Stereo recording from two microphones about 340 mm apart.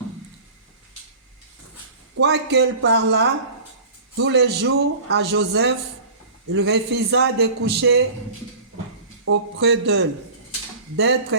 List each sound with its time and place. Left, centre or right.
2.2 s a man's voice: right
9.6 s speech: right